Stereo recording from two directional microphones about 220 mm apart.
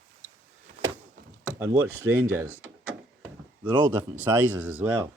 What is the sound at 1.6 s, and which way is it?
Speech, 10° right (ahead or behind).